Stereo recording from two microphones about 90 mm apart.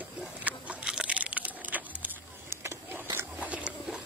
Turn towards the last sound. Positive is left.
turn(degrees=-15)  # may be behind; listen again after turning